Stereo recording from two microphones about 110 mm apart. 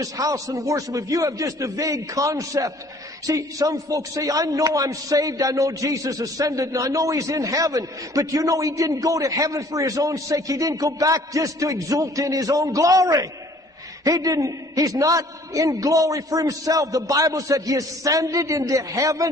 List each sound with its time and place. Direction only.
0.0 s a man's voice: 30° right (ahead or behind)